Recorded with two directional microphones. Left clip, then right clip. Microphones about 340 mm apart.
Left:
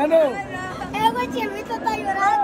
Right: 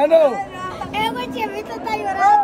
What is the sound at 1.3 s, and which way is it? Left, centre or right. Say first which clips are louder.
Children playing: right 1 dB; right.